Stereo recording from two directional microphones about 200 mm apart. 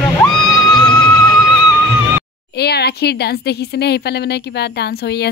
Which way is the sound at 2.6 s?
55° left (ahead or behind).